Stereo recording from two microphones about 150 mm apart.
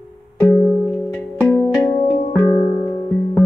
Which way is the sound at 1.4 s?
10° left (ahead or behind).